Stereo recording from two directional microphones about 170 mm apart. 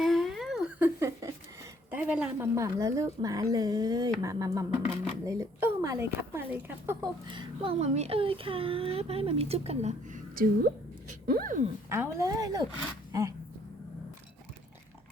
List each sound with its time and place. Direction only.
0.0 s a sound: centre (ahead or behind)
0.9 s a sound: 15° right (ahead or behind)
1.9 s a woman's voice: 10° right (ahead or behind)
2.6 s speech: 20° right (ahead or behind)
7.0 s speech: 30° right (ahead or behind)
10.3 s a woman's voice: 60° right (ahead or behind)
11.9 s speech: 15° right (ahead or behind)